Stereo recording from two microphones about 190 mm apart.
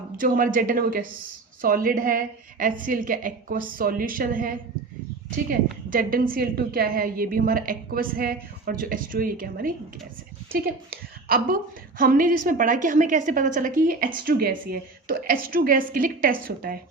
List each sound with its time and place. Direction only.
0.2 s a woman's voice: 45° right (ahead or behind)
11.3 s a woman's voice: 50° right (ahead or behind)